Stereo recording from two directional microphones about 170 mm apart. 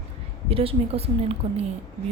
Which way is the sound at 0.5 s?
35° right (ahead or behind).